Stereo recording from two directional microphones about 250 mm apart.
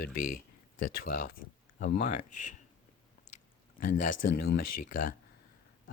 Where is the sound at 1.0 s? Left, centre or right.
Left.